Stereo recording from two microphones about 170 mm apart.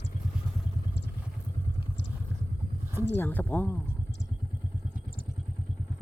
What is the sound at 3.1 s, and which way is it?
Speech, 10° left (ahead or behind).